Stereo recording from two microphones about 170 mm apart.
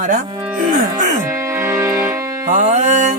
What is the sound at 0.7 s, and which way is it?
Music, 45° right (ahead or behind).